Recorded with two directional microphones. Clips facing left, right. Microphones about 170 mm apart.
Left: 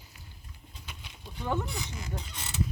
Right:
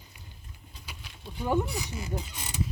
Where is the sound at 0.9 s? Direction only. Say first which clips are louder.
Right 3 dB; 10° right (ahead or behind).